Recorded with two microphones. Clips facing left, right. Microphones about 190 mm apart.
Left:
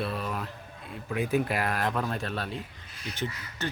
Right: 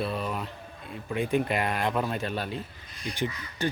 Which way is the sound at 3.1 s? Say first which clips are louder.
Right 3 dB; 15° right (ahead or behind).